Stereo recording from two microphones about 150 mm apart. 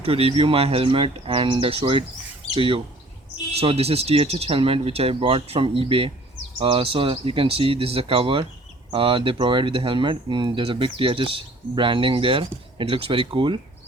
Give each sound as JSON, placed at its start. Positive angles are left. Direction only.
{"t": 0.0, "sound": "speech", "side_deg": -40}